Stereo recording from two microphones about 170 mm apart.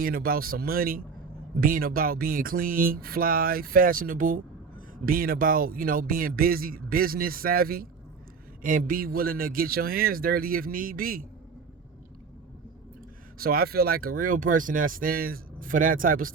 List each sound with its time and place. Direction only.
0.0 s speech: 60° right (ahead or behind)
13.4 s speech: 60° right (ahead or behind)